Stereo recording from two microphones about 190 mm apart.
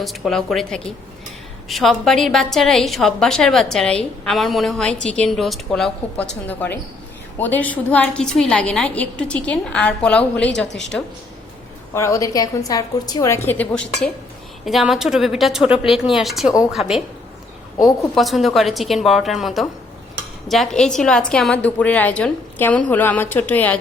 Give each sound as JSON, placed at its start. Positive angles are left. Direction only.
{"t": 0.0, "sound": "a woman's voice", "side_deg": 0}
{"t": 17.7, "sound": "a woman's voice", "side_deg": 0}